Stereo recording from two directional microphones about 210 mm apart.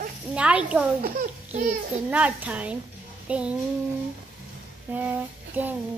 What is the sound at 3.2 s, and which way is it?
Child singing, 5° right (ahead or behind).